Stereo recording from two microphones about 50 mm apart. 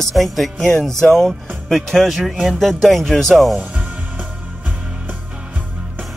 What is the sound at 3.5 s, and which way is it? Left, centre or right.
Music, right.